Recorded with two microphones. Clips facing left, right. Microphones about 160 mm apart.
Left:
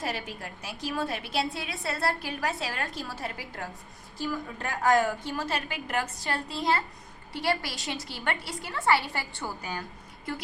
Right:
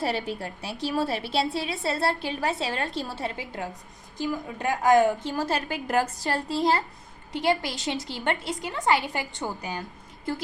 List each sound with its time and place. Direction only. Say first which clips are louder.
0.0 s a woman's voice: right 6 dB; 30° right (ahead or behind)
5.3 s a woman's voice: right 4 dB; 40° right (ahead or behind)
7.3 s a woman's voice: right 4 dB; 20° right (ahead or behind)